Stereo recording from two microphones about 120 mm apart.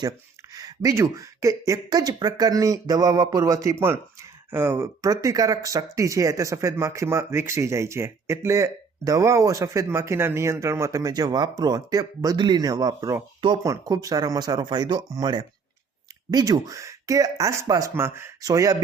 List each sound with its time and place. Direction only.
0.5 s speech: 30° right (ahead or behind)
5.0 s speech: 30° right (ahead or behind)